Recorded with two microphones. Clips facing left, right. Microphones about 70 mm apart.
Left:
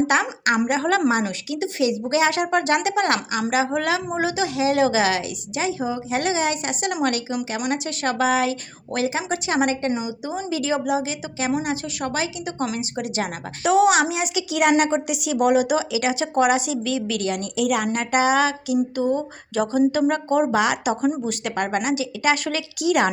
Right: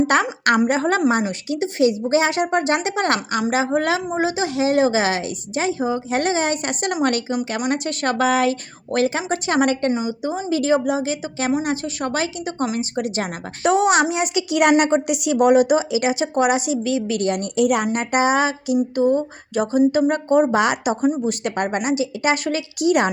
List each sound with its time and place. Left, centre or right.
0.1 s a woman's voice: right
0.7 s a woman's voice: right
9.9 s a woman's voice: right
15.7 s speech: right
17.2 s a woman's voice: right
17.8 s a woman's voice: right